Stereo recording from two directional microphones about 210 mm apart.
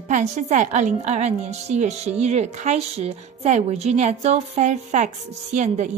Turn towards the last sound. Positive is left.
turn(degrees=-35)  # may be behind; listen again after turning